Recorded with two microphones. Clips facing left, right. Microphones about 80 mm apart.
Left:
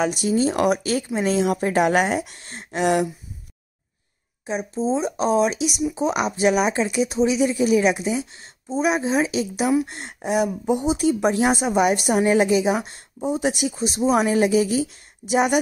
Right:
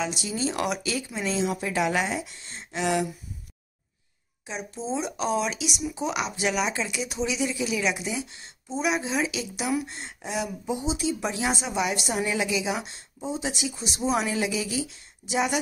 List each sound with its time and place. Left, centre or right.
0.0 s speech: left
4.5 s speech: left
9.8 s speech: left
13.2 s speech: left